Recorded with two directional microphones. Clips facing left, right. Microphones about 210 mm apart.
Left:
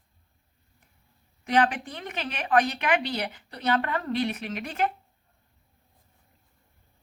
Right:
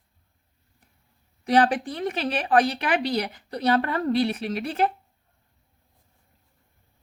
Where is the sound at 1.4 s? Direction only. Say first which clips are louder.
Right 4 dB; 35° right (ahead or behind).